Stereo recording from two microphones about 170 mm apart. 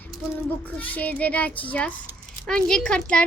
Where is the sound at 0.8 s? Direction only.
10° left (ahead or behind).